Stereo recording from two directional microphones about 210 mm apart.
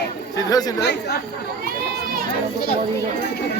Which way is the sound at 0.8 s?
50° left (ahead or behind).